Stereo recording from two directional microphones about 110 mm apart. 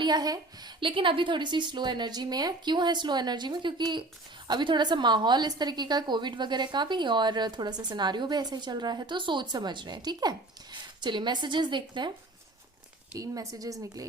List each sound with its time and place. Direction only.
0.0 s a woman's voice: 40° right (ahead or behind)
13.1 s a woman's voice: 30° right (ahead or behind)